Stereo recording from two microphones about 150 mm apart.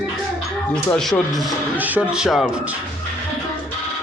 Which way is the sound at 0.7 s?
5° left (ahead or behind).